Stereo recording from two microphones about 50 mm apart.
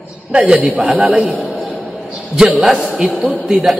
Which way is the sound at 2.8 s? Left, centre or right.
Centre.